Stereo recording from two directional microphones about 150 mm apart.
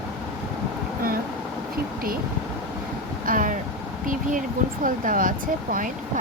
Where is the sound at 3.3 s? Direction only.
65° right (ahead or behind).